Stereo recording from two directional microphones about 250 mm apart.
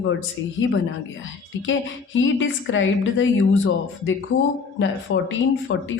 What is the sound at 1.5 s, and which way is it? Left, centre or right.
Speech, left.